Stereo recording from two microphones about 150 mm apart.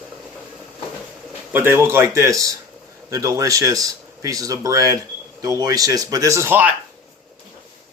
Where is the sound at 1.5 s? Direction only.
15° right (ahead or behind).